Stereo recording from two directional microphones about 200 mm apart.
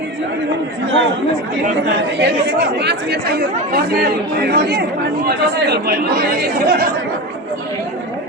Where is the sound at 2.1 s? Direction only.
60° right (ahead or behind).